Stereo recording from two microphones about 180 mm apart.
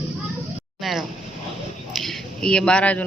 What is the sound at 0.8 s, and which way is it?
Speech, centre (ahead or behind).